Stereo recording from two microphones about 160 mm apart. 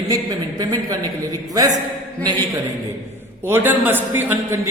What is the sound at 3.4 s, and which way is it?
A man's voice, 10° right (ahead or behind).